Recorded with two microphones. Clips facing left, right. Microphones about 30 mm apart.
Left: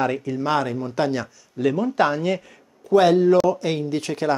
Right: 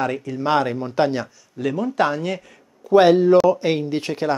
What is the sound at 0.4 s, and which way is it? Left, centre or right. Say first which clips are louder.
Speech: right 4 dB; centre.